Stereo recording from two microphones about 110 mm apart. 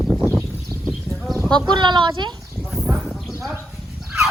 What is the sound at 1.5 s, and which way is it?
Speech, 45° right (ahead or behind).